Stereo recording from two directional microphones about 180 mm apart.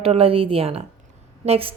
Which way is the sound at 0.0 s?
35° right (ahead or behind).